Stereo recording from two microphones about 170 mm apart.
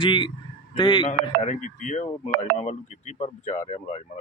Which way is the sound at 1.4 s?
45° left (ahead or behind).